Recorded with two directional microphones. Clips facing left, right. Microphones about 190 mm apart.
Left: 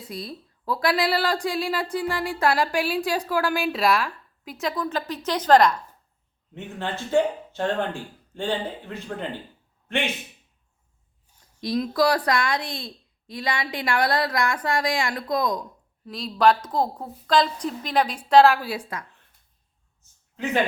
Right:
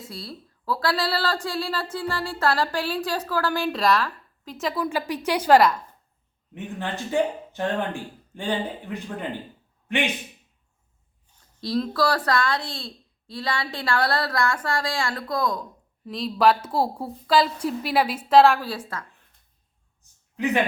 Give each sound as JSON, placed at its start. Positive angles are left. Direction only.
{"t": 0.1, "sound": "a woman's voice", "side_deg": 20}
{"t": 4.5, "sound": "a woman's voice", "side_deg": -5}
{"t": 11.6, "sound": "a woman's voice", "side_deg": 15}
{"t": 16.0, "sound": "a woman's voice", "side_deg": 0}
{"t": 20.0, "sound": "a sound", "side_deg": -15}